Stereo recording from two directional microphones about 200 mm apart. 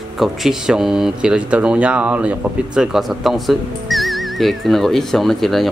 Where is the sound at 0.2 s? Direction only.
Centre (ahead or behind).